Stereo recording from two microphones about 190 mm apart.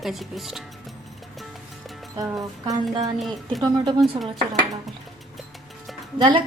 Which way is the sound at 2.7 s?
20° right (ahead or behind).